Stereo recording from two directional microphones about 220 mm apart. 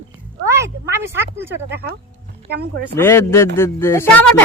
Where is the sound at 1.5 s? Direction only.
50° right (ahead or behind).